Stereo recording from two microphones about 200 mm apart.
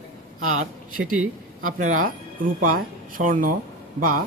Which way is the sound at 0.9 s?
90° right.